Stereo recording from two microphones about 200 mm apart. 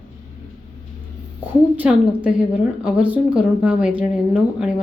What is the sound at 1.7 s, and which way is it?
A woman's voice, 5° right (ahead or behind).